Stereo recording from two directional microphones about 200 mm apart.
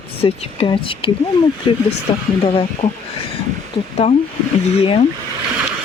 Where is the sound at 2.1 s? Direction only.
25° left (ahead or behind).